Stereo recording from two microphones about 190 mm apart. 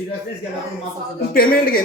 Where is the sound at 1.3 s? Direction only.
50° left (ahead or behind).